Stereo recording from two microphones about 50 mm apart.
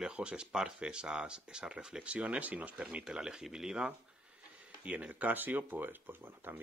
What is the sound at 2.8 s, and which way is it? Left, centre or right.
Speech, centre.